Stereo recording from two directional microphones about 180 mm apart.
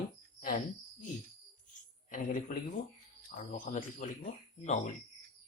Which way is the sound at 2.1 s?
45° left (ahead or behind).